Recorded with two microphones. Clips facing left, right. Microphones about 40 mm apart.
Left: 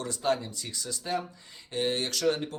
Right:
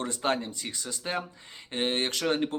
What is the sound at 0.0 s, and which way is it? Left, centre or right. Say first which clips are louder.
Speech: even; right.